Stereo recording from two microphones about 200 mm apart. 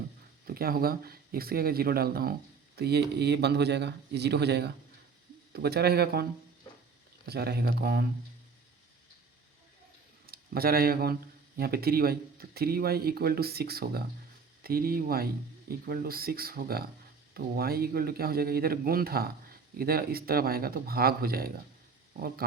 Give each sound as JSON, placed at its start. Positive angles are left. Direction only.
{"t": 0.4, "sound": "a man's voice", "side_deg": -50}
{"t": 7.3, "sound": "speech", "side_deg": -50}
{"t": 10.2, "sound": "speech", "side_deg": -50}